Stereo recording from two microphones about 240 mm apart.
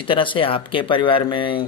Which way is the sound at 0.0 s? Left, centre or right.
Left.